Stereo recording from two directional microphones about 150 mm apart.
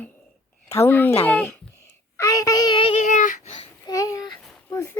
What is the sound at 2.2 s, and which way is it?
Child singing, 20° left (ahead or behind).